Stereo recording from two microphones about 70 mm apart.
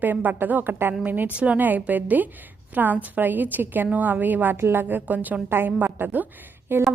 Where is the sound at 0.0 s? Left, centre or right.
Right.